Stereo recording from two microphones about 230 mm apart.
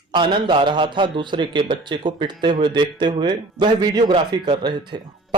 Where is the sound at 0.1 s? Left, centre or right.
Centre.